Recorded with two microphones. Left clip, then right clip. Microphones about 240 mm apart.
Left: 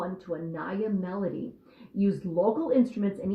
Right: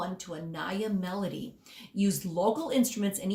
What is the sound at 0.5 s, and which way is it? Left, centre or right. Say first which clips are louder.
Speech: right 1 dB; right.